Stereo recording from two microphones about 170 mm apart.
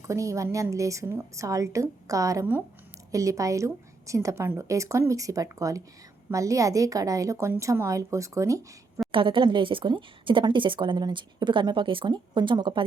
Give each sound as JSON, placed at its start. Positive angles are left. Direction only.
{"t": 0.0, "sound": "a woman's voice", "side_deg": -15}
{"t": 9.1, "sound": "a woman's voice", "side_deg": -30}